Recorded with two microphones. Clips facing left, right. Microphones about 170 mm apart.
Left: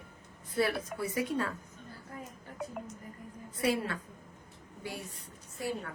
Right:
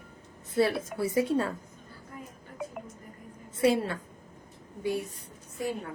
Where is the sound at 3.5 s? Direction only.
25° right (ahead or behind).